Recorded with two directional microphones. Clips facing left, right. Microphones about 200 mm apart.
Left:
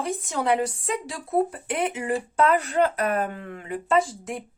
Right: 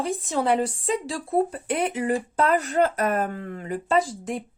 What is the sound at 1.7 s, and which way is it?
Speech, 35° right (ahead or behind).